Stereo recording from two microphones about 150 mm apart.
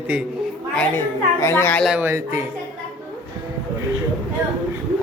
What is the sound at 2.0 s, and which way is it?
Speech, 15° right (ahead or behind).